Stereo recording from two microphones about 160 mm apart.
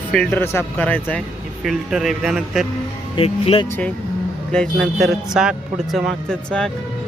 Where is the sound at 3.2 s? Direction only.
35° left (ahead or behind).